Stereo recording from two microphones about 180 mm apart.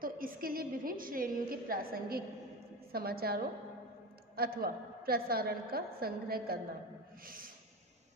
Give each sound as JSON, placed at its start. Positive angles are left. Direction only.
{"t": 0.0, "sound": "a woman's voice", "side_deg": -50}
{"t": 7.2, "sound": "snort", "side_deg": -50}